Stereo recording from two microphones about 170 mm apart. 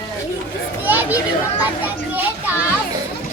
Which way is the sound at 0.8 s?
10° right (ahead or behind).